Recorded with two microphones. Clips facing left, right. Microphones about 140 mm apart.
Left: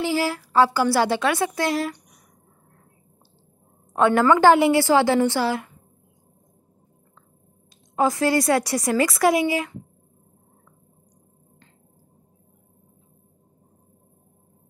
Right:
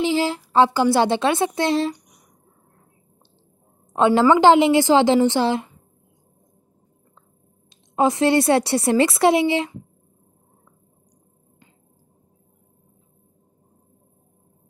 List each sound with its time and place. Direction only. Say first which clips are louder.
0.0 s a woman's voice: right 3 dB; 20° right (ahead or behind)
3.9 s a woman's voice: right 2 dB; 20° right (ahead or behind)
7.7 s a woman's voice: right 2 dB; 25° right (ahead or behind)